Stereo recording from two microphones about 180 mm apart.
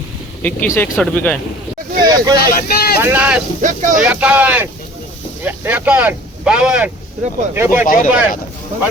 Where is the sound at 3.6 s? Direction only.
45° right (ahead or behind).